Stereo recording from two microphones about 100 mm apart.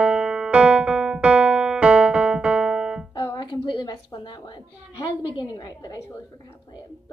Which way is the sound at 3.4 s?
50° left (ahead or behind).